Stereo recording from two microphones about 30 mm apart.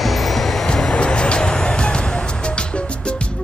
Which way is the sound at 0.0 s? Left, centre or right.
Centre.